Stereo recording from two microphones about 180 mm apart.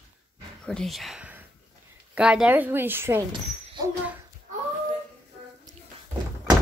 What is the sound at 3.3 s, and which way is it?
Speech, 25° right (ahead or behind).